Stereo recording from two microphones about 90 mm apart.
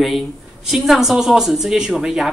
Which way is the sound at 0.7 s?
5° right (ahead or behind).